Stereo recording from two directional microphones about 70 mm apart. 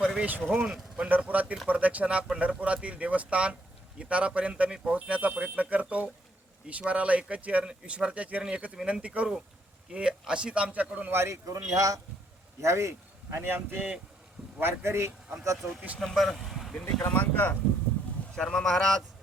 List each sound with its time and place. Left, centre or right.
0.2 s speech: right
11.1 s speech: right
11.4 s speech: right
12.6 s speech: right
13.7 s speech: centre
14.6 s speech: right
16.0 s speech: centre
17.0 s speech: left
18.3 s speech: centre